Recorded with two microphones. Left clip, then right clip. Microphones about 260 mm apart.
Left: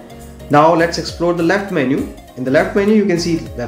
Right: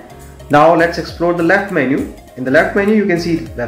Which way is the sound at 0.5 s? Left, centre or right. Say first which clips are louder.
Right 2 dB; centre.